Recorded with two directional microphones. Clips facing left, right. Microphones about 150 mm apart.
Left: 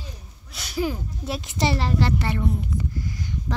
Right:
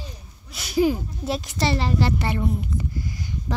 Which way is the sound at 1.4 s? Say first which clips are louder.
Left 1 dB; 20° left (ahead or behind).